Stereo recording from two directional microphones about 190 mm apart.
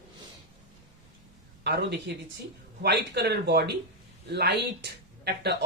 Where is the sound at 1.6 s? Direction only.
65° right (ahead or behind).